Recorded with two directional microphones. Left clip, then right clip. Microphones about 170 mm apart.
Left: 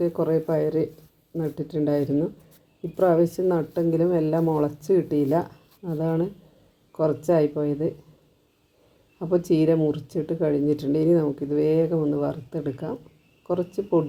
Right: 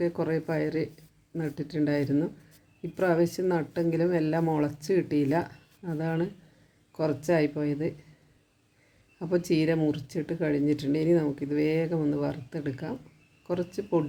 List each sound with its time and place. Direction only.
0.0 s speech: centre (ahead or behind)
5.4 s a sound: 20° right (ahead or behind)
6.0 s speech: 5° right (ahead or behind)
9.3 s speech: centre (ahead or behind)
13.5 s speech: centre (ahead or behind)